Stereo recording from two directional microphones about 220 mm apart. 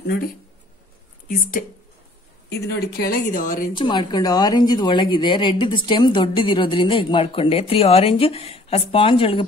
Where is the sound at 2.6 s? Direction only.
45° left (ahead or behind).